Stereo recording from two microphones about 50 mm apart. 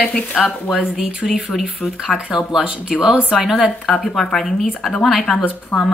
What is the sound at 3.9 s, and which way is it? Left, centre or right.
A woman's voice, centre.